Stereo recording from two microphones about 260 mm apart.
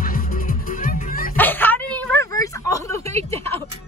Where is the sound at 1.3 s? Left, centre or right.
Centre.